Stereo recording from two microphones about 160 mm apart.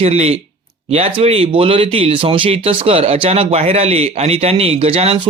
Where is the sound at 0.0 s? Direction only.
40° right (ahead or behind).